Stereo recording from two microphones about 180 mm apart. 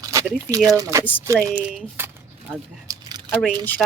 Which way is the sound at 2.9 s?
20° right (ahead or behind).